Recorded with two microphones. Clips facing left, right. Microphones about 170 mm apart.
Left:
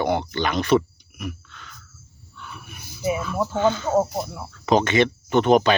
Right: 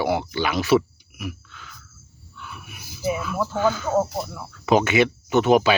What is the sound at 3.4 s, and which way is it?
Speech, 20° left (ahead or behind).